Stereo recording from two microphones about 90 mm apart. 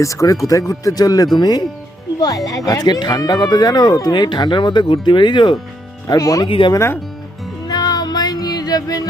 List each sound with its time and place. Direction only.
0.0 s speech: 40° left (ahead or behind); by 5.5 s 60° left (ahead or behind)
6.1 s speech: 40° left (ahead or behind)
6.7 s speech: 30° left (ahead or behind)
7.7 s music: 45° left (ahead or behind)